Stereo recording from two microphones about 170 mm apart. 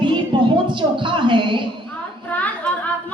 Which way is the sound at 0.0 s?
30° right (ahead or behind).